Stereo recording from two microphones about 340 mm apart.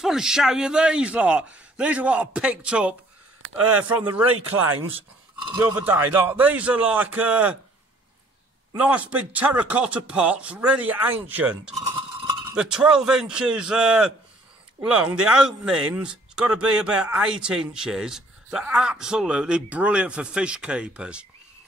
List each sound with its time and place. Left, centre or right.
0.0 s a man's voice: centre
3.4 s a sound: right
5.4 s a man's voice: centre
8.7 s a man's voice: centre